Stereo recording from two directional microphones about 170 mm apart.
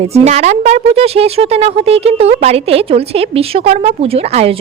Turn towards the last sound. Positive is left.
turn(degrees=-35)  # may be behind; listen again after turning